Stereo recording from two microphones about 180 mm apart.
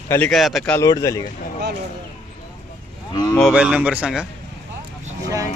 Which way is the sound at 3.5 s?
5° right (ahead or behind).